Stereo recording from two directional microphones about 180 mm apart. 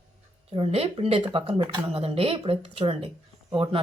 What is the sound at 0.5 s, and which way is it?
Speech, 35° right (ahead or behind).